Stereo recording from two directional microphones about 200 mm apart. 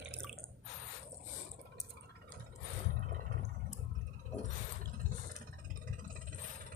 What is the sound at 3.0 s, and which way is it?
Vehicle, 45° right (ahead or behind).